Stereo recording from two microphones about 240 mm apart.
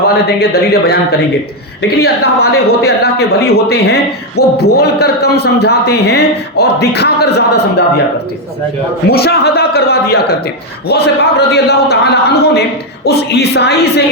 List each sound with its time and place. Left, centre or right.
0.3 s a man's voice: left
2.0 s speech: left
9.0 s a man's voice: left